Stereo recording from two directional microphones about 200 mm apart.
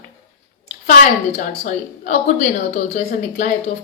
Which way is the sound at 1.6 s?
40° left (ahead or behind).